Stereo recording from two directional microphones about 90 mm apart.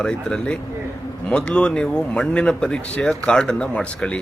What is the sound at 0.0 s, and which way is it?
A man's voice, 10° left (ahead or behind).